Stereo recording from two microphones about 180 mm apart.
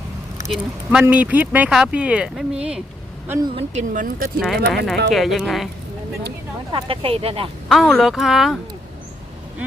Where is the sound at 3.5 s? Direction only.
45° right (ahead or behind).